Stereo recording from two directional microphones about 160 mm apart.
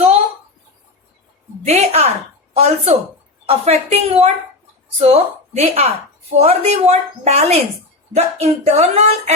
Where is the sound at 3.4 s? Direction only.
40° right (ahead or behind).